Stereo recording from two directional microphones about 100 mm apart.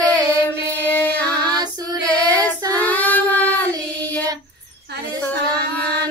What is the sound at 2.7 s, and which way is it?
Child singing, 15° left (ahead or behind).